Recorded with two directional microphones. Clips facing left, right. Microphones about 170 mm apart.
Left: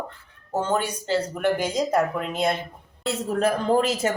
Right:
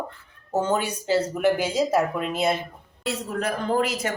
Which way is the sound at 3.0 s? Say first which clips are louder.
Left 4 dB; 25° left (ahead or behind).